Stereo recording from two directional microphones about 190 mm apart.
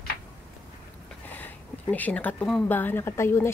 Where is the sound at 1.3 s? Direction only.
10° left (ahead or behind).